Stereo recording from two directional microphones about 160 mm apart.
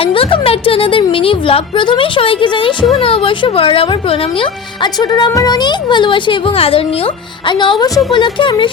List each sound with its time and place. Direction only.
0.0 s speech: 35° left (ahead or behind)